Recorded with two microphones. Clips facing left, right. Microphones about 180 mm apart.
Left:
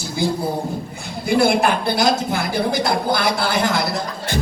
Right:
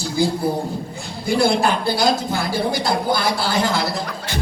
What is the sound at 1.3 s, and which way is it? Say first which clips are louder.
Speech: left 1 dB; 20° left (ahead or behind).